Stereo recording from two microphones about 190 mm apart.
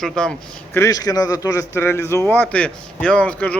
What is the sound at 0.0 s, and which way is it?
Speech, 5° left (ahead or behind).